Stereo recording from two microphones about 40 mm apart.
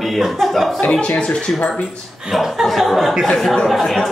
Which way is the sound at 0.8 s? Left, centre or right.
Left.